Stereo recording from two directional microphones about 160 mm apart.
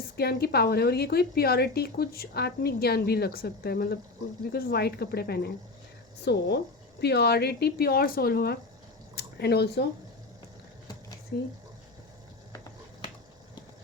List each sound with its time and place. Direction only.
0.2 s speech: 80° left
6.3 s speech: 90° left; by 8.5 s 70° left (ahead or behind)
9.1 s speech: 90° left
11.3 s speech: 80° left